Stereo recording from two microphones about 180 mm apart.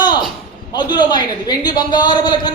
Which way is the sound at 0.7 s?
25° left (ahead or behind).